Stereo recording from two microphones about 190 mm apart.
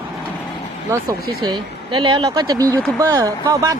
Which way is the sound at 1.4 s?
25° right (ahead or behind).